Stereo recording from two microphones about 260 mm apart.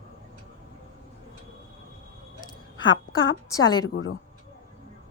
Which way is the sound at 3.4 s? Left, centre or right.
Centre.